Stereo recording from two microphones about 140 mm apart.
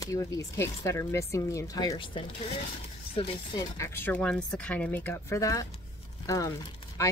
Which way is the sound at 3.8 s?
15° left (ahead or behind).